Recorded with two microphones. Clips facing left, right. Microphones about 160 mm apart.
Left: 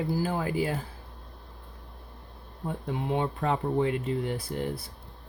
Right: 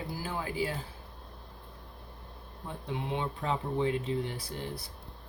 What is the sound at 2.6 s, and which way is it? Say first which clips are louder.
Speech: left 5 dB; 50° left (ahead or behind).